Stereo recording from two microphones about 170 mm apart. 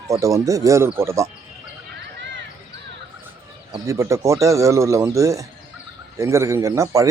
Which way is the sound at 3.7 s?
20° right (ahead or behind).